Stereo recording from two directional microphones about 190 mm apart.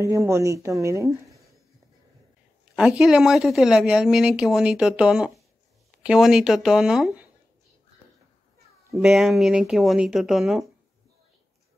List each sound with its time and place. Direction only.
0.0 s speech: 15° right (ahead or behind)
2.7 s speech: centre (ahead or behind)
8.9 s speech: centre (ahead or behind)